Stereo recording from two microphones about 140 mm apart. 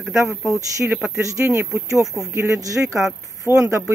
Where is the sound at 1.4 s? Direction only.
10° right (ahead or behind).